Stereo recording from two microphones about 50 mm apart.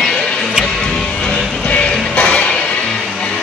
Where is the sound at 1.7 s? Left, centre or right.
Left.